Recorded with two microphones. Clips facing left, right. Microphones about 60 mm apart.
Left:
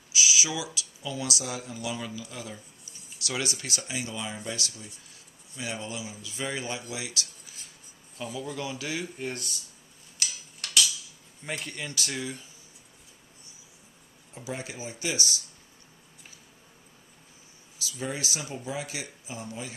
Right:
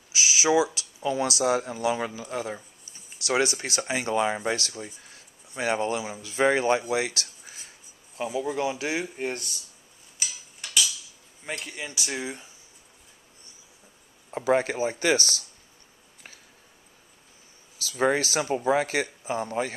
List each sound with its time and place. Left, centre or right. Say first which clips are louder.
0.1 s speech: right 6 dB; right
6.9 s a sound: right 9 dB; right
8.3 s speech: right 7 dB; right
10.1 s tick-tock: even; centre
11.4 s speech: right 1 dB; centre; by 12.4 s right
14.3 s speech: right 14 dB; right
17.9 s speech: right 11 dB; right